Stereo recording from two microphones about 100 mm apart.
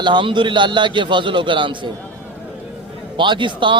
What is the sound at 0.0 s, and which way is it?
A man's voice, 50° right (ahead or behind).